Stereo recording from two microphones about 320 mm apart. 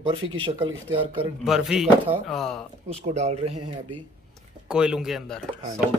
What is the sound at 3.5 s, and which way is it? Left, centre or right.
Speech, right.